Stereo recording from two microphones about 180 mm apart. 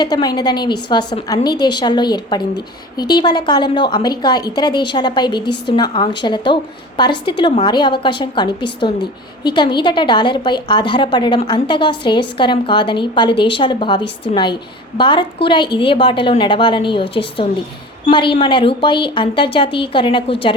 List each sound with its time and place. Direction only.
0.0 s a woman's voice: 20° left (ahead or behind)